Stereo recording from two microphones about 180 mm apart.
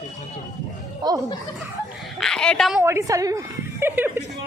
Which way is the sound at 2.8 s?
15° right (ahead or behind).